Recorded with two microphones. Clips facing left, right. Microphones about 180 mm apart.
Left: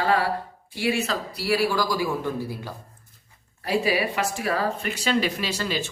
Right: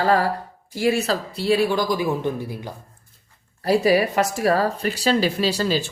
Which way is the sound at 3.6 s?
40° right (ahead or behind).